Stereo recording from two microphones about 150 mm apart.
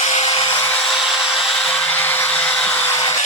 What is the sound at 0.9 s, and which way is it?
Hair dryer, centre (ahead or behind).